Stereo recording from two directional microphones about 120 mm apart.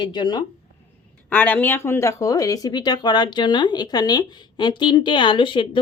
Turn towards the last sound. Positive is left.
turn(degrees=45)  # may be behind; listen again after turning